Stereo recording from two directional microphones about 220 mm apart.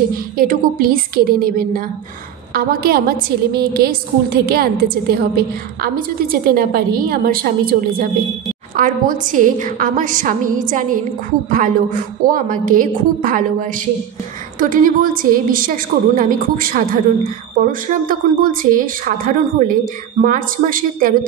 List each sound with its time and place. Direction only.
0.4 s a woman's voice: 40° right (ahead or behind)